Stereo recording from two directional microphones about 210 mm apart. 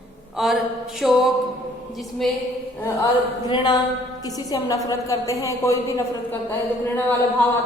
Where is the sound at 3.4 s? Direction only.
20° left (ahead or behind).